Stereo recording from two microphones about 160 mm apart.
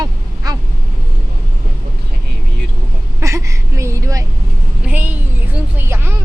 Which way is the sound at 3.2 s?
20° right (ahead or behind).